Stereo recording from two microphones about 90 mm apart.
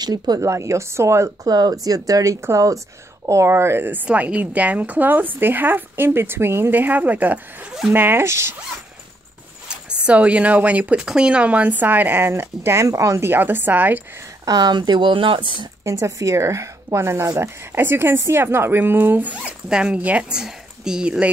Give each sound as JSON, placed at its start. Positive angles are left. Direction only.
{"t": 0.0, "sound": "a woman's voice", "side_deg": -50}
{"t": 0.5, "sound": "speech", "side_deg": -35}
{"t": 1.5, "sound": "speech", "side_deg": -45}
{"t": 10.0, "sound": "speech", "side_deg": -15}
{"t": 14.4, "sound": "speech", "side_deg": -50}
{"t": 15.8, "sound": "speech", "side_deg": -35}